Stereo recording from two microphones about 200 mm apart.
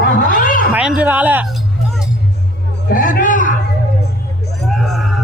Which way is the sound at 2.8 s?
45° left (ahead or behind).